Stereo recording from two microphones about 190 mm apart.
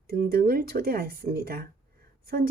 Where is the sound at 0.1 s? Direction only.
50° right (ahead or behind).